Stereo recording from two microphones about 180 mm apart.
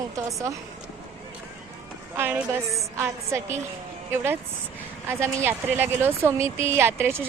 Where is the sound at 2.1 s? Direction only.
10° right (ahead or behind).